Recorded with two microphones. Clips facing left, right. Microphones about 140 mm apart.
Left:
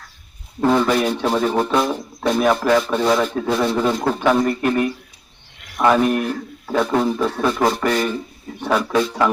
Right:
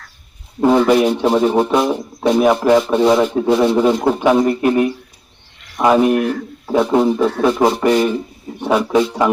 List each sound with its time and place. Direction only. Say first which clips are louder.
0.6 s a man's voice: right 5 dB; 15° right (ahead or behind)